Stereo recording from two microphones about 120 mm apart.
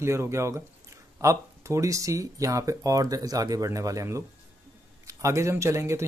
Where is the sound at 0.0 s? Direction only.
20° right (ahead or behind).